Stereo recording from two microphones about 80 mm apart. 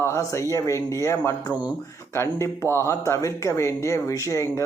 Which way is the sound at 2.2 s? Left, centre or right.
Left.